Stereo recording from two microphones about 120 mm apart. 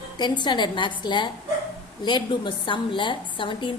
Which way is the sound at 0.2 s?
40° left (ahead or behind).